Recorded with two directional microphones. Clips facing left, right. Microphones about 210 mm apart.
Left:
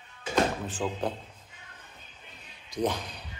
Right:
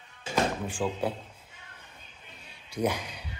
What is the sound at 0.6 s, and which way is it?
Speech, 10° right (ahead or behind).